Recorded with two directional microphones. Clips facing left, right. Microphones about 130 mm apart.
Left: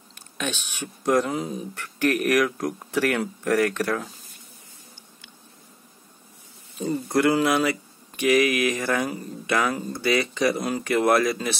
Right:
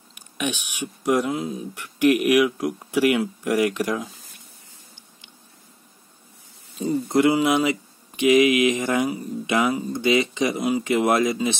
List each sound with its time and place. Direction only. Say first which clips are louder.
0.1 s speech: right 3 dB; 10° right (ahead or behind)
7.1 s speech: right 2 dB; 20° right (ahead or behind)